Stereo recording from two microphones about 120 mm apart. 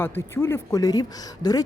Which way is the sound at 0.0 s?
20° left (ahead or behind).